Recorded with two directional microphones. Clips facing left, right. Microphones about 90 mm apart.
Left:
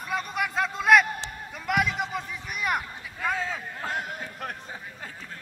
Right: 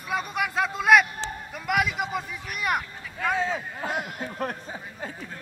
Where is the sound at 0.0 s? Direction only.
Centre (ahead or behind).